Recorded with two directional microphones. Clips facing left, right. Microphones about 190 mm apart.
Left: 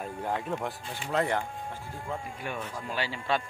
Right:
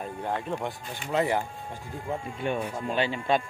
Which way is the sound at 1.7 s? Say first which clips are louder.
Right 3 dB; 20° right (ahead or behind).